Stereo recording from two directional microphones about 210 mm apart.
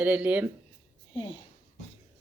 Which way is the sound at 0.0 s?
5° right (ahead or behind).